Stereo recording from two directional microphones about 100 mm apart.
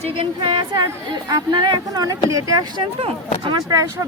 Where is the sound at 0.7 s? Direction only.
40° right (ahead or behind).